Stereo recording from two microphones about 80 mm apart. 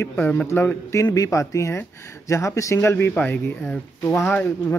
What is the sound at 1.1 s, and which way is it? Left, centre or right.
Speech, left.